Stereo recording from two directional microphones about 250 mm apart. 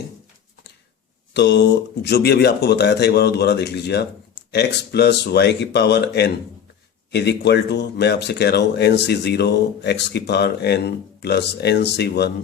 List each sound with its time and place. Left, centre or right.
1.3 s speech: left